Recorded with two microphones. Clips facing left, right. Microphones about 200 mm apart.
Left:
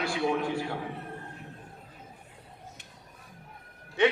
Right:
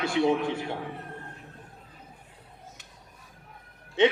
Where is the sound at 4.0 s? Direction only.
20° right (ahead or behind).